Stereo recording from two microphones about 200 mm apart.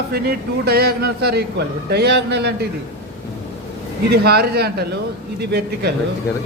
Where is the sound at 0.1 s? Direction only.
50° right (ahead or behind).